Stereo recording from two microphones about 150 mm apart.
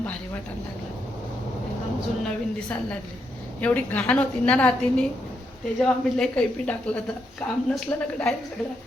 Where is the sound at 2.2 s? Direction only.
5° left (ahead or behind).